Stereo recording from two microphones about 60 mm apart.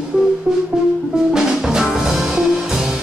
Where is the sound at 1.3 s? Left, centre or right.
Centre.